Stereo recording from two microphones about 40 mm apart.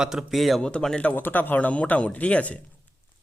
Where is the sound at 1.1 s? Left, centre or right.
Left.